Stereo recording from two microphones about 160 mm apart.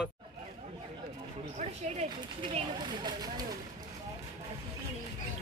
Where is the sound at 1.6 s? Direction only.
45° right (ahead or behind).